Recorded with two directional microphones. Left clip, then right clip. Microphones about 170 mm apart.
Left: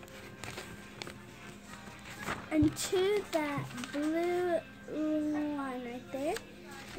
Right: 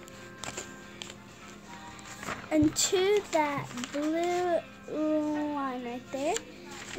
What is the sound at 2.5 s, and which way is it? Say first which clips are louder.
Speech: right 4 dB; 20° right (ahead or behind).